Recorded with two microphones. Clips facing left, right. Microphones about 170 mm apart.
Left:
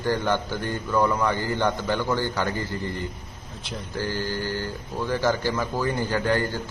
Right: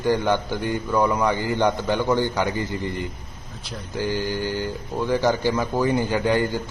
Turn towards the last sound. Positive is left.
turn(degrees=-15)  # may be behind; listen again after turning